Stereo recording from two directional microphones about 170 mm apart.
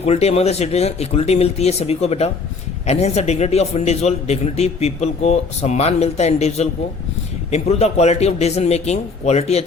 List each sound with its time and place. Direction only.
0.0 s a man's voice: 40° left (ahead or behind)